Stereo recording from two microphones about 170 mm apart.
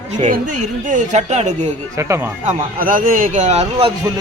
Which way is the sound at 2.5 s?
55° right (ahead or behind).